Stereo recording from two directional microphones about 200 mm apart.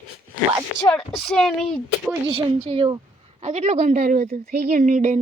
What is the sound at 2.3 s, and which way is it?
A woman's voice, 25° right (ahead or behind).